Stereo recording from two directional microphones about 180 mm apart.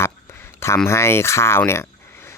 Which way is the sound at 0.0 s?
15° left (ahead or behind).